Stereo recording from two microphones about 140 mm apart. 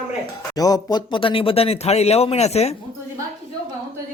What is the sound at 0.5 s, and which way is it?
Speech, 25° left (ahead or behind).